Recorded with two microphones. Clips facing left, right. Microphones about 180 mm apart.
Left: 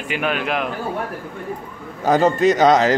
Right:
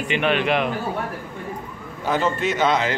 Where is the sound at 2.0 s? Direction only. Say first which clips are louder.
Left 7 dB; 40° left (ahead or behind).